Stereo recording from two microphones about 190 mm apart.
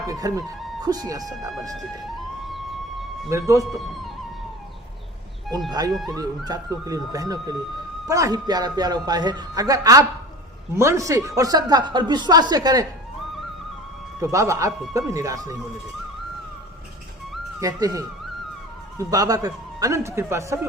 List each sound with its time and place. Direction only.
0.1 s speech: 20° right (ahead or behind)
2.5 s music: centre (ahead or behind)
3.2 s a man's voice: 15° right (ahead or behind)
6.1 s a man's voice: 20° right (ahead or behind)
14.2 s a man's voice: 15° right (ahead or behind)
17.6 s a man's voice: 20° right (ahead or behind)